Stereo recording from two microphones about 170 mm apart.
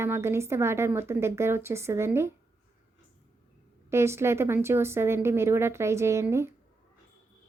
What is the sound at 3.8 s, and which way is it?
Speech, 15° right (ahead or behind).